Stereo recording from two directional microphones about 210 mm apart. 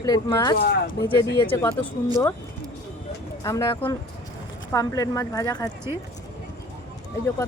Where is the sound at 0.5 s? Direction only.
50° left (ahead or behind).